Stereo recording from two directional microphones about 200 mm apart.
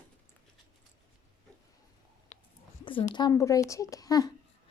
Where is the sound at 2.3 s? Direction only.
40° left (ahead or behind).